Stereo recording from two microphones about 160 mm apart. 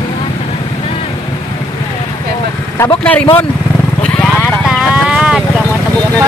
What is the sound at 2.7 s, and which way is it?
Speech, 15° left (ahead or behind).